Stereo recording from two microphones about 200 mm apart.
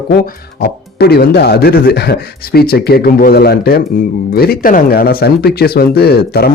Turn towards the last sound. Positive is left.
turn(degrees=50)  # may be behind; listen again after turning